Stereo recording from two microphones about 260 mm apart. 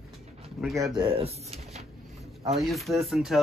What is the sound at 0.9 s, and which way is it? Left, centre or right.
Speech, centre.